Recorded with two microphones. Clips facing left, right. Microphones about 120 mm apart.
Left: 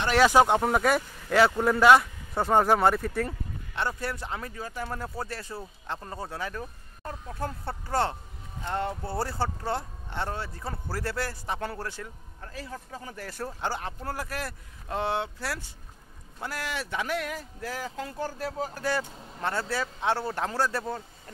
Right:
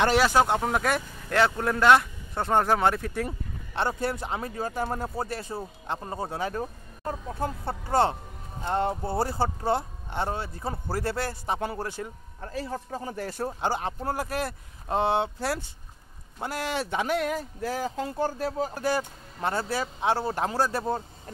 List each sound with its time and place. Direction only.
0.2 s speech: centre (ahead or behind)
3.7 s speech: 25° right (ahead or behind)
4.8 s speech: 20° right (ahead or behind)
12.4 s speech: 35° right (ahead or behind)
18.9 s speech: 15° right (ahead or behind)